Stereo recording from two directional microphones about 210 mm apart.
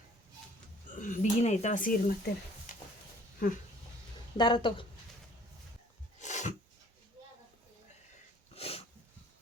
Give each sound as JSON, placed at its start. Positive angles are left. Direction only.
{"t": 1.0, "sound": "speech", "side_deg": 35}
{"t": 4.4, "sound": "speech", "side_deg": 20}
{"t": 6.1, "sound": "a sound", "side_deg": 35}
{"t": 8.5, "sound": "dog", "side_deg": 30}